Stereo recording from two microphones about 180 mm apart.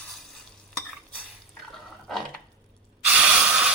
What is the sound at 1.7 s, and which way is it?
Water, centre (ahead or behind).